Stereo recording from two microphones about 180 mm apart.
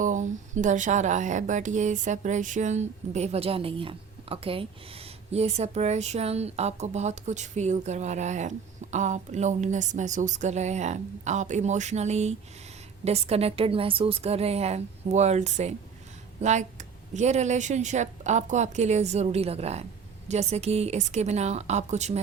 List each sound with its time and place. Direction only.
0.0 s speech: 45° right (ahead or behind)